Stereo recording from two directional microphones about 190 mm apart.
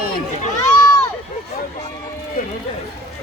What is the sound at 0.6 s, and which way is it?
Run, 20° left (ahead or behind).